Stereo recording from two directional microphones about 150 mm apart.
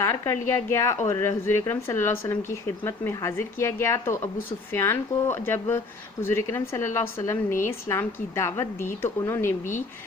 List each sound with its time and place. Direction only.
0.0 s a woman's voice: 20° left (ahead or behind)